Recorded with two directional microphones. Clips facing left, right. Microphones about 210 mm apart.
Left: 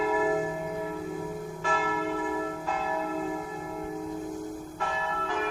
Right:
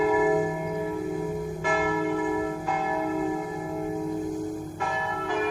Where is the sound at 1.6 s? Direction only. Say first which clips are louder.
Right 3 dB; 15° right (ahead or behind).